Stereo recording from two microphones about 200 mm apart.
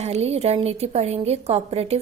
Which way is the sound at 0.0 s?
30° right (ahead or behind).